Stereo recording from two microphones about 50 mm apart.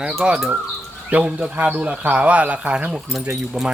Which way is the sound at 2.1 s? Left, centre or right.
Right.